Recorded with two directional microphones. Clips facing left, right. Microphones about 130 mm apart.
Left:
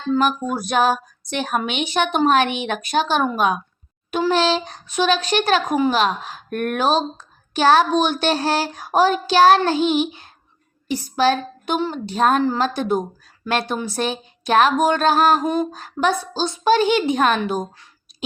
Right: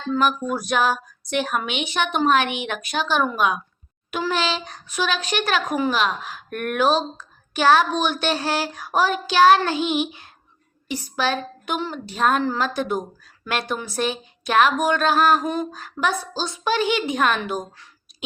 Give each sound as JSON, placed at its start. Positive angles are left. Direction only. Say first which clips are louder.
{"t": 0.1, "sound": "speech", "louder": "left 2 dB", "side_deg": 30}
{"t": 10.8, "sound": "a sound", "louder": "left 6 dB", "side_deg": 30}
{"t": 11.8, "sound": "a woman's voice", "louder": "left 5 dB", "side_deg": 20}
{"t": 12.1, "sound": "a woman's voice", "louder": "left 3 dB", "side_deg": 35}
{"t": 15.4, "sound": "a woman's voice", "louder": "left 4 dB", "side_deg": 20}